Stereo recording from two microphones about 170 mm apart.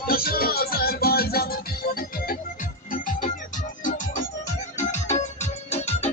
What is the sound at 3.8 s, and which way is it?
Music, 50° left (ahead or behind).